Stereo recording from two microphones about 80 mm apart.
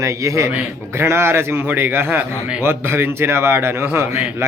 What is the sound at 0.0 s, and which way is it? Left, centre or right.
A man's voice, right.